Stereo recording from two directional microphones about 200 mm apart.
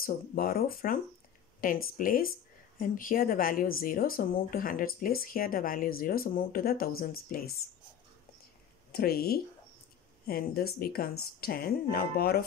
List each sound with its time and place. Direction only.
0.0 s speech: 45° left (ahead or behind)
8.9 s speech: 50° left (ahead or behind)